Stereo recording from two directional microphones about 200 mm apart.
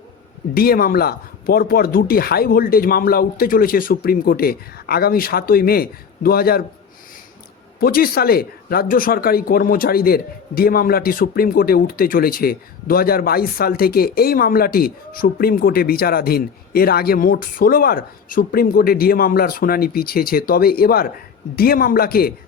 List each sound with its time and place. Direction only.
0.5 s speech: 50° left (ahead or behind)
7.8 s speech: 50° left (ahead or behind)